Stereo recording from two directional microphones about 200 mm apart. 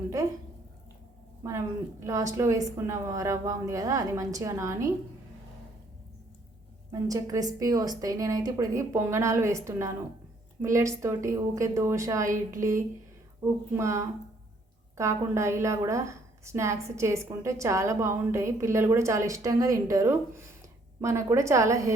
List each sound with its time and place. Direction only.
1.5 s a woman's voice: 15° right (ahead or behind)
6.9 s a woman's voice: 15° right (ahead or behind)